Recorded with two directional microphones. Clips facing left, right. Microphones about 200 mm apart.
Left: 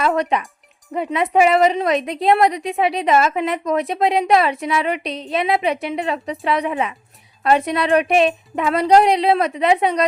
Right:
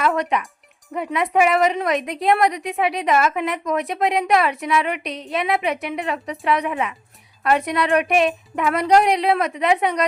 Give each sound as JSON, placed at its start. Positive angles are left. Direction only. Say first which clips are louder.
{"t": 0.0, "sound": "a woman's voice", "louder": "left 2 dB", "side_deg": 30}